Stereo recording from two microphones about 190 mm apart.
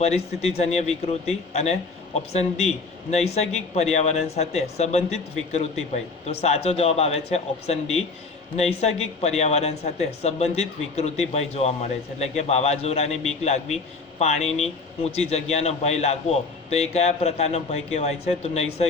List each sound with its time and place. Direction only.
0.0 s a man's voice: 35° left (ahead or behind)